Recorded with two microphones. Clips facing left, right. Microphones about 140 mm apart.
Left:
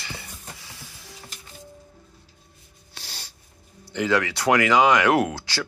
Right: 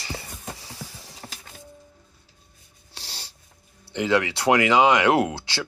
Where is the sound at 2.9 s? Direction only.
30° right (ahead or behind).